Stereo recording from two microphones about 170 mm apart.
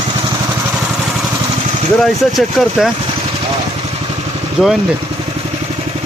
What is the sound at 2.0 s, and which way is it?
Speech, centre (ahead or behind).